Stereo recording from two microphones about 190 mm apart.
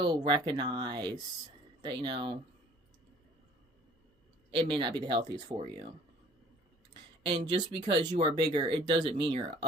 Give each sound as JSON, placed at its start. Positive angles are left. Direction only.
{"t": 0.0, "sound": "speech", "side_deg": -20}
{"t": 4.5, "sound": "speech", "side_deg": -25}
{"t": 7.2, "sound": "speech", "side_deg": -25}